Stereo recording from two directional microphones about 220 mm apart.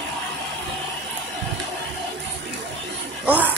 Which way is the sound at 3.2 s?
5° right (ahead or behind).